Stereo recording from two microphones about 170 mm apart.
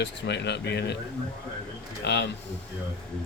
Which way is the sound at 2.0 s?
90° left.